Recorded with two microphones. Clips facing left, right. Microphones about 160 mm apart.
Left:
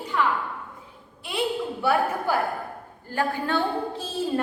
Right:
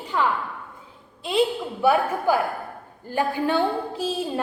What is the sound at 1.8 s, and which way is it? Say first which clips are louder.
A woman's voice: right 4 dB; 20° right (ahead or behind).